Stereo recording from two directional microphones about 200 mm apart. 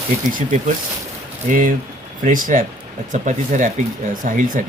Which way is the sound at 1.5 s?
40° right (ahead or behind).